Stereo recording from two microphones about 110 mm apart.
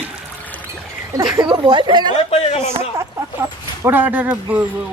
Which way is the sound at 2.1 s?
65° left (ahead or behind).